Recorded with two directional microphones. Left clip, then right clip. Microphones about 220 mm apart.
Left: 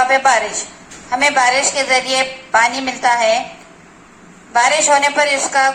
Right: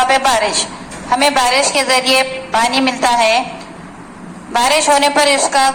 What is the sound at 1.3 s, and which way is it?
A woman's voice, 40° right (ahead or behind).